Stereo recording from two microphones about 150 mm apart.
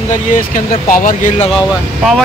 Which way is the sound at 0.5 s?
60° left (ahead or behind).